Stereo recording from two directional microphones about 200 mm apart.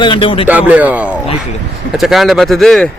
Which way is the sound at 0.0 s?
25° left (ahead or behind).